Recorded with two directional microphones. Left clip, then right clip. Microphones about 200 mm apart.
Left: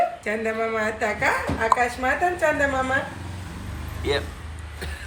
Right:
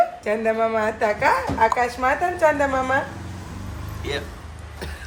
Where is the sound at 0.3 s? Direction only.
55° right (ahead or behind).